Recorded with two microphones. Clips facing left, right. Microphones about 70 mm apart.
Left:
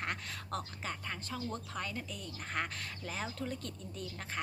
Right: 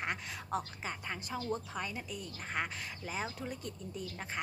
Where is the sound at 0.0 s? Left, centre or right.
Centre.